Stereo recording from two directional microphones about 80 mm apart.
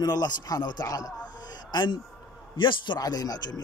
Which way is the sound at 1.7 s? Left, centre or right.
Left.